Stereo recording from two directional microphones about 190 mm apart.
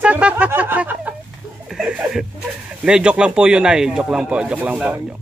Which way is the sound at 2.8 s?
5° right (ahead or behind).